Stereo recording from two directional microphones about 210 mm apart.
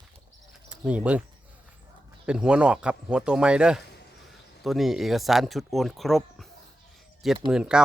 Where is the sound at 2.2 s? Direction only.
5° right (ahead or behind).